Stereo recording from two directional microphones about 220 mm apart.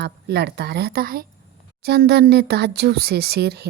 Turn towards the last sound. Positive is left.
turn(degrees=-50)  # may be behind; listen again after turning